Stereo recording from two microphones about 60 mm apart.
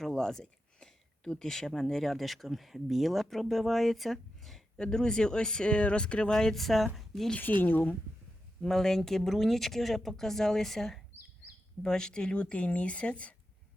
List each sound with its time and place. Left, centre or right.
0.0 s speech: centre
7.3 s speech: left
8.6 s speech: centre